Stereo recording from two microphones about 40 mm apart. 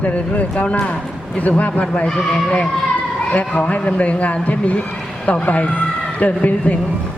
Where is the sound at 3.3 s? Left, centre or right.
Left.